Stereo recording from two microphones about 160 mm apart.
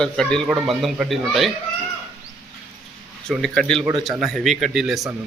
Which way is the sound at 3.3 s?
5° left (ahead or behind).